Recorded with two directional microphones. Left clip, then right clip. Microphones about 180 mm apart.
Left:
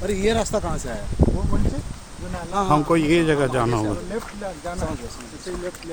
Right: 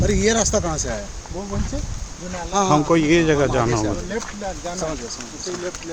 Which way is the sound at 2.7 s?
5° left (ahead or behind).